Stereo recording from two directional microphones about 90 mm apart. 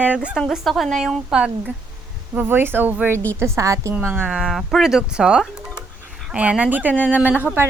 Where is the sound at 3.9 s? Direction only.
20° right (ahead or behind).